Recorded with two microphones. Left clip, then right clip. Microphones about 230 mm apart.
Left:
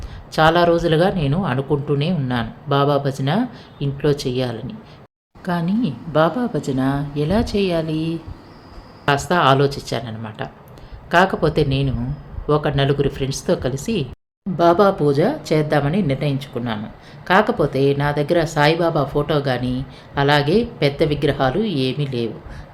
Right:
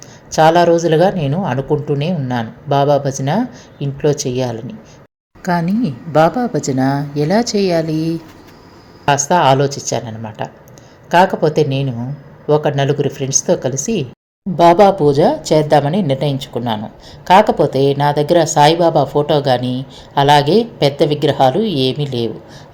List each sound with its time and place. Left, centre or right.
0.3 s a woman's voice: centre
5.4 s a woman's voice: centre
9.3 s a woman's voice: centre